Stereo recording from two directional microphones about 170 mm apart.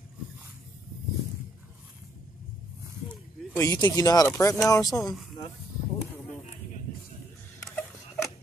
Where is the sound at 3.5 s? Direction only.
20° left (ahead or behind).